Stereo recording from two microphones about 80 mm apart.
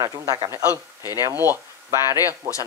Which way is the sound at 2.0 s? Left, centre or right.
Left.